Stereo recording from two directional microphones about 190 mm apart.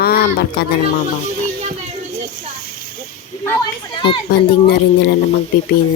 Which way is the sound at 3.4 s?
15° left (ahead or behind).